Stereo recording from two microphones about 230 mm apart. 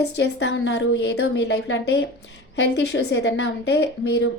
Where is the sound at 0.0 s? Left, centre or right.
Left.